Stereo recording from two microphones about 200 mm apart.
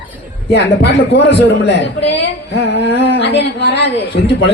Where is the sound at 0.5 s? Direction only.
60° left (ahead or behind).